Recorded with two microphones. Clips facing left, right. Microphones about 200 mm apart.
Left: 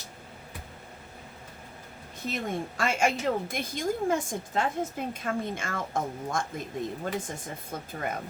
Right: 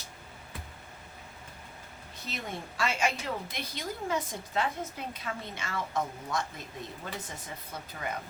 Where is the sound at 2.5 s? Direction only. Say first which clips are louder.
Left 2 dB; 50° left (ahead or behind).